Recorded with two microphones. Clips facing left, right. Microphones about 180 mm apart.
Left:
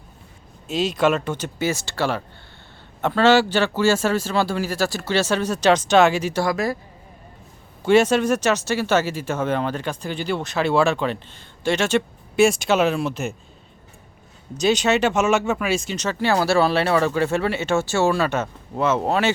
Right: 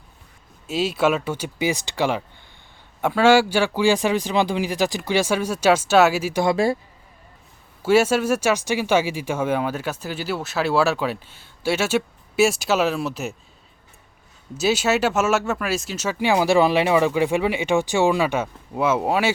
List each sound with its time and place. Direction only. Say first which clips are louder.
0.7 s speech: left 1 dB; 5° right (ahead or behind)
6.4 s speech: right 5 dB; 25° right (ahead or behind)
7.8 s speech: left 1 dB; 5° right (ahead or behind)
14.6 s speech: left 1 dB; 5° right (ahead or behind)